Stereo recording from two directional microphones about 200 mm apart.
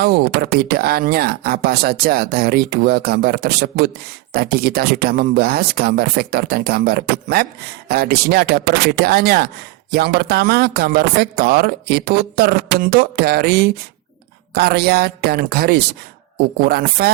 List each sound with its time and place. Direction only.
0.7 s speech: 50° right (ahead or behind)